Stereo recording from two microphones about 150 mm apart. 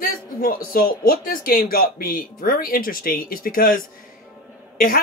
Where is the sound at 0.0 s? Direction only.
70° left (ahead or behind).